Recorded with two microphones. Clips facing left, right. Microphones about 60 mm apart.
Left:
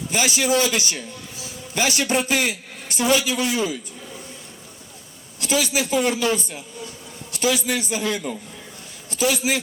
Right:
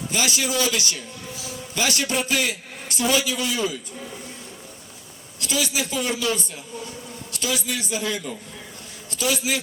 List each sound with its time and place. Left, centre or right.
0.1 s a man's voice: left
3.2 s speech: left
5.4 s speech: left
9.0 s speech: left